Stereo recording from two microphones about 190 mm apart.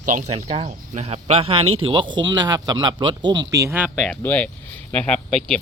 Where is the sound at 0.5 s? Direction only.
35° right (ahead or behind); by 3.9 s 10° right (ahead or behind).